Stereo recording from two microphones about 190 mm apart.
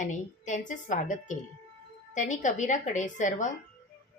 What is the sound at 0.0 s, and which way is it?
Speech, 40° left (ahead or behind).